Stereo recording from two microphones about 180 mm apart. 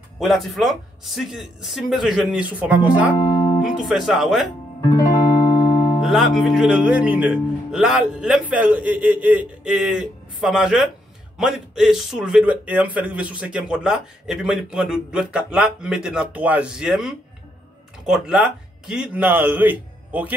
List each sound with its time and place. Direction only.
0.2 s speech: centre (ahead or behind)
3.2 s music: 25° left (ahead or behind)
3.6 s speech: centre (ahead or behind)
4.8 s music: 20° left (ahead or behind)
6.0 s a man's voice: centre (ahead or behind)